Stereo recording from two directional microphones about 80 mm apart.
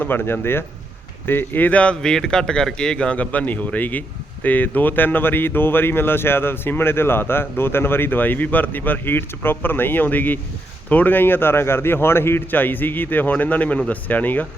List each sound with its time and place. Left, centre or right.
0.0 s speech: left